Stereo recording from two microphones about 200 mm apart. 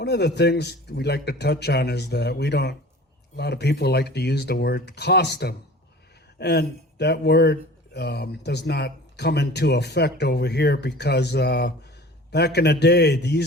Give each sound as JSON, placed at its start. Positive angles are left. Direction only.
{"t": 0.0, "sound": "speech", "side_deg": 55}